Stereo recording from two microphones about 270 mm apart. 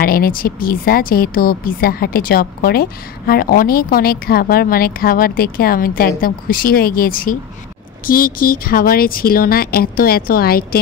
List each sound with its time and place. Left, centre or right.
0.0 s speech: left